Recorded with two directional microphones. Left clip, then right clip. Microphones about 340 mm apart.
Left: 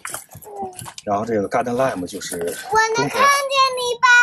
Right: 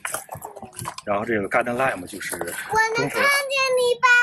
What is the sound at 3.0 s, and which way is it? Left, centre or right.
Child singing, centre.